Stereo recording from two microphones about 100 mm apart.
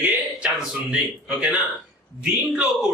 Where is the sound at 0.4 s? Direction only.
5° right (ahead or behind).